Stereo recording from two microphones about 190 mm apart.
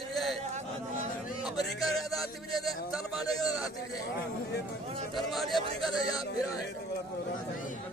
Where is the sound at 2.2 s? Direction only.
Centre (ahead or behind).